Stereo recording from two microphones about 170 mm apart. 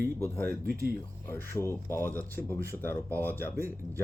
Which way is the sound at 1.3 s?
15° left (ahead or behind).